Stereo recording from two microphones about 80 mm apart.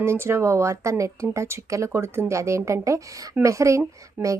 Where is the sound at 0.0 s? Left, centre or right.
Right.